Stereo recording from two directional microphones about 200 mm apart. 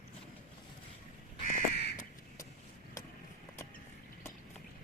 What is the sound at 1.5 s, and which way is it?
Crow, 55° left (ahead or behind).